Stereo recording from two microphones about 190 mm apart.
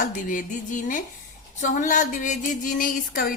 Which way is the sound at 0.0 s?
45° left (ahead or behind).